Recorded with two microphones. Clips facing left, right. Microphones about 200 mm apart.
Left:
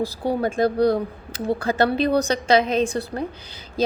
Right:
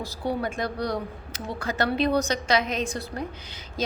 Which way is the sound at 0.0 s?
30° left (ahead or behind).